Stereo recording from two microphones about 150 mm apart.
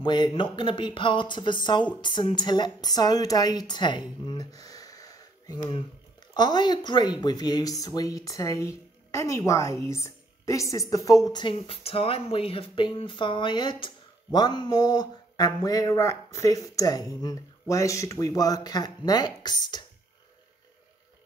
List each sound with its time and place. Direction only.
0.0 s a woman's voice: 30° left (ahead or behind)